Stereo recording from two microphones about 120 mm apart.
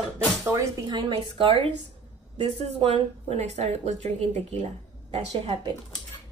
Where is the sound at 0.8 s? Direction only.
40° right (ahead or behind).